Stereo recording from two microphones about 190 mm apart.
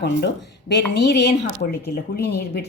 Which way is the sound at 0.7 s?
65° left (ahead or behind).